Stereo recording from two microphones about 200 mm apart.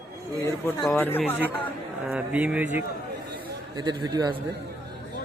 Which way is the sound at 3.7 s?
20° right (ahead or behind).